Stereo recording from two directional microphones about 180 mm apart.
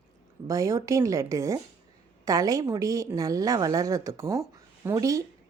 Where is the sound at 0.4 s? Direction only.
15° right (ahead or behind).